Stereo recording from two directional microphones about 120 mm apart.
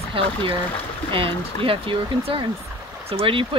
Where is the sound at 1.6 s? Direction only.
50° right (ahead or behind).